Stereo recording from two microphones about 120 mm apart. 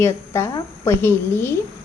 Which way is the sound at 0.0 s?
25° left (ahead or behind).